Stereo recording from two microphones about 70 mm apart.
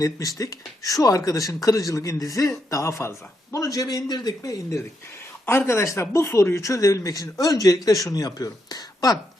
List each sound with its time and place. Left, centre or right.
0.0 s speech: left
5.5 s speech: left